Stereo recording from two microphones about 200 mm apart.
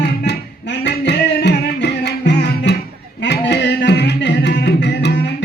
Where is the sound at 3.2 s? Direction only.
60° left (ahead or behind).